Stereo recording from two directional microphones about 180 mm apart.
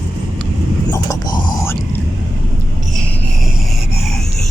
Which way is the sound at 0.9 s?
20° left (ahead or behind).